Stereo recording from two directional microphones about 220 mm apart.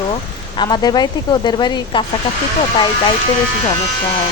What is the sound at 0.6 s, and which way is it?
Speech, 20° left (ahead or behind).